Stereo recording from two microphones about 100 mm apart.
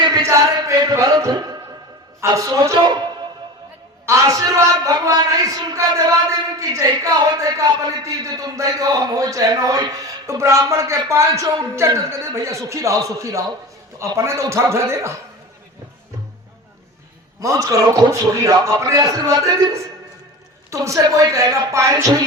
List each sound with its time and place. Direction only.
0.2 s chant: 30° right (ahead or behind)
0.8 s a man's voice: 35° right (ahead or behind)
2.7 s speech: 50° right (ahead or behind)
4.0 s a man's voice: 30° right (ahead or behind)
17.4 s a man's voice: 35° right (ahead or behind)